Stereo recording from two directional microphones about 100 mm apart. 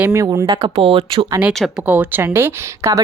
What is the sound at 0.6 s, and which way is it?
Speech, 70° right (ahead or behind).